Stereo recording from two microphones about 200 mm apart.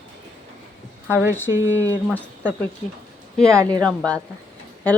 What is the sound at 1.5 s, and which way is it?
Speech, 15° right (ahead or behind).